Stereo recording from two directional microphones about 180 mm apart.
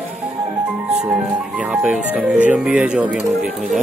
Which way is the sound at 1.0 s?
5° right (ahead or behind).